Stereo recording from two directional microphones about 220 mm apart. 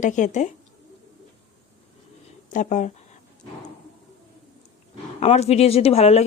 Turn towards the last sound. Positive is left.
turn(degrees=30)  # may be behind; listen again after turning